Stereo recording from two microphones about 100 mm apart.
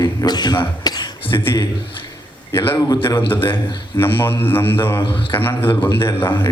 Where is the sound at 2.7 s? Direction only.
40° left (ahead or behind).